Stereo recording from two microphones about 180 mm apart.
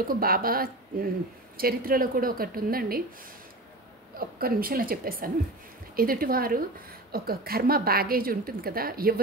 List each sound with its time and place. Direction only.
0.1 s a woman's voice: 55° right (ahead or behind)
4.2 s a woman's voice: 55° right (ahead or behind)